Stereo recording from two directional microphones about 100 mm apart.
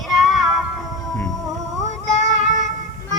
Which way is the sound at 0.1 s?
Centre (ahead or behind).